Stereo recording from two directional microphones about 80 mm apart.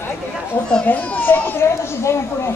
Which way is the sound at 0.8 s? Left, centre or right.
Centre.